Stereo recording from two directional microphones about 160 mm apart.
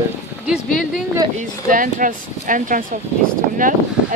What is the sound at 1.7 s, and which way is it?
Speech, 55° right (ahead or behind).